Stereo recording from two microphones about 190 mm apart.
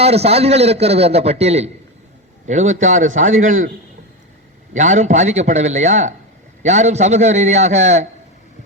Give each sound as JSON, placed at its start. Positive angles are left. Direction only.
{"t": 0.0, "sound": "a man's voice", "side_deg": -35}
{"t": 4.7, "sound": "a man's voice", "side_deg": -40}